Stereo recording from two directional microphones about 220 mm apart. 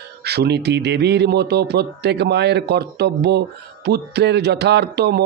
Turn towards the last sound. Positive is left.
turn(degrees=-45)  # may be behind; listen again after turning